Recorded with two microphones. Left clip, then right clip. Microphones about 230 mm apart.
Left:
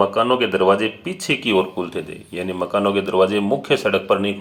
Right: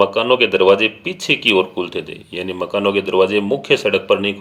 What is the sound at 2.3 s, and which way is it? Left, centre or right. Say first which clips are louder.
Speech: even; right.